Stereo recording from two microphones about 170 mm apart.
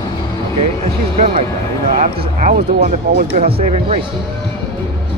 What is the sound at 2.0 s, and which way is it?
Speech, 50° right (ahead or behind).